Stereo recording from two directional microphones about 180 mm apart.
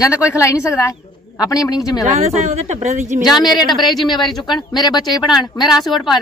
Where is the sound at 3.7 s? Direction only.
Centre (ahead or behind).